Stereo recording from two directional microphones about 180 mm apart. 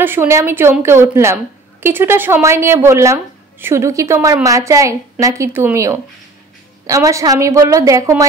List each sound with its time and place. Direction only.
0.0 s a woman's voice: 10° right (ahead or behind)